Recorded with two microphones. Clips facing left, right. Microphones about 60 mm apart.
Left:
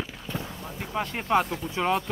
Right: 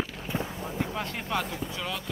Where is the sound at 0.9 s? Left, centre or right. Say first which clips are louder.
Left 6 dB; left.